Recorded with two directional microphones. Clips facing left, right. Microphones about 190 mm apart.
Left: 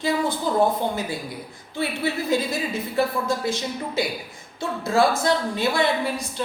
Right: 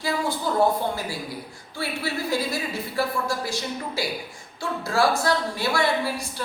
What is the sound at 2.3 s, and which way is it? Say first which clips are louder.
A woman's voice: left 3 dB; 20° left (ahead or behind).